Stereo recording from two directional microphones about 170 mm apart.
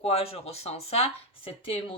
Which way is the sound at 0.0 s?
35° left (ahead or behind).